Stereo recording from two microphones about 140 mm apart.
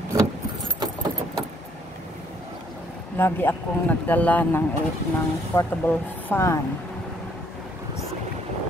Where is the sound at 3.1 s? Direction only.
15° left (ahead or behind).